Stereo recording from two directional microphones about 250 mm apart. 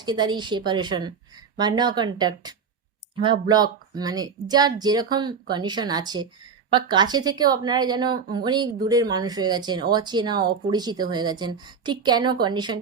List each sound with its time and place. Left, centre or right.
0.0 s a woman's voice: centre